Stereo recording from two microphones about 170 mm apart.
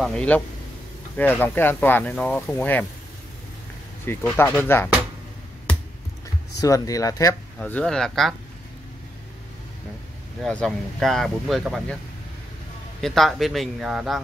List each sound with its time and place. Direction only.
0.0 s speech: 5° left (ahead or behind)
4.0 s speech: 15° left (ahead or behind)
6.6 s speech: 20° left (ahead or behind)
7.7 s speech: 5° left (ahead or behind)
10.4 s speech: 5° left (ahead or behind)
13.0 s speech: centre (ahead or behind)